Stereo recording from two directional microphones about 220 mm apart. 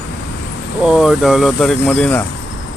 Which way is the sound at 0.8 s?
5° right (ahead or behind).